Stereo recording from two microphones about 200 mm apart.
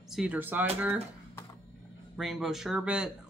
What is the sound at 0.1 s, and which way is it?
Speech, 5° right (ahead or behind).